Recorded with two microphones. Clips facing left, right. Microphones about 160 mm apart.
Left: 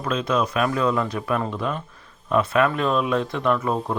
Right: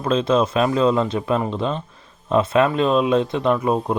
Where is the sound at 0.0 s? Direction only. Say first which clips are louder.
Right 5 dB; 30° right (ahead or behind).